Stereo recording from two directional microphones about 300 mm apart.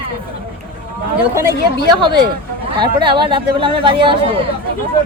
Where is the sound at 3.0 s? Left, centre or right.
Centre.